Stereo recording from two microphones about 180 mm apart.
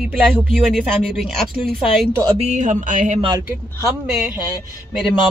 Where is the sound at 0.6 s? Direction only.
Centre (ahead or behind).